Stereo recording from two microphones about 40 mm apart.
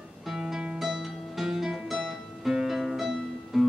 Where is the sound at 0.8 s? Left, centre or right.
Centre.